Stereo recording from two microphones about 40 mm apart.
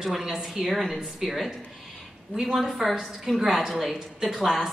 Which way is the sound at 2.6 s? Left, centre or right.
Centre.